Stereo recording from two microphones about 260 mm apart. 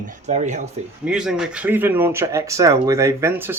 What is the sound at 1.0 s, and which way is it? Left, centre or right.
Speech, centre.